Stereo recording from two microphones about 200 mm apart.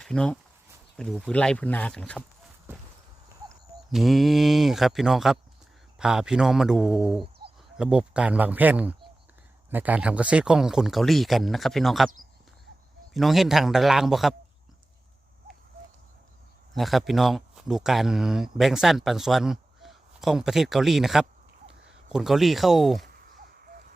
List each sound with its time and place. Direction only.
0.0 s speech: 5° left (ahead or behind)
3.9 s speech: centre (ahead or behind)
13.1 s speech: centre (ahead or behind)
16.7 s speech: centre (ahead or behind)
23.6 s a sound: 45° right (ahead or behind)